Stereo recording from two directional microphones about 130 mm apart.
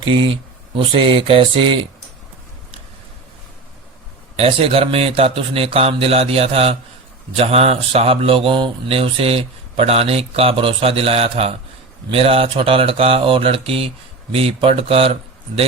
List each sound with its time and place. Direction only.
0.0 s speech: 40° right (ahead or behind)
4.4 s speech: 50° right (ahead or behind)